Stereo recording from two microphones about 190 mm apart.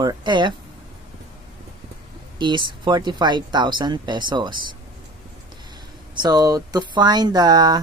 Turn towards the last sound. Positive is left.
turn(degrees=-20)  # may be behind; listen again after turning